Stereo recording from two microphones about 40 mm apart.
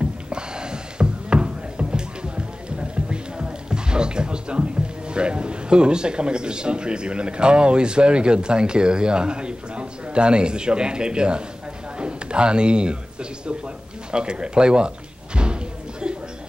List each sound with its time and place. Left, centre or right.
0.0 s music: right
12.0 s speech: right